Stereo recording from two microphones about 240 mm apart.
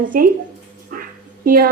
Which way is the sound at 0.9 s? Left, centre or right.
Right.